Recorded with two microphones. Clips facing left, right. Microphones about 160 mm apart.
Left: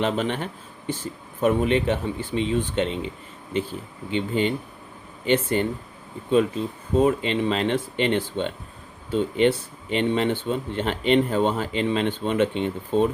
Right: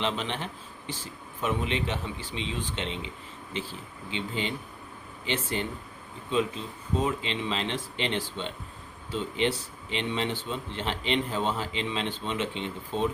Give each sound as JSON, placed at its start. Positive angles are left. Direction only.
{"t": 0.0, "sound": "speech", "side_deg": 50}
{"t": 4.1, "sound": "speech", "side_deg": 50}
{"t": 7.0, "sound": "speech", "side_deg": 50}